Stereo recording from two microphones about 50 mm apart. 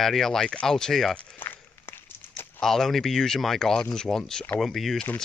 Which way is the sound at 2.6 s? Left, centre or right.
Centre.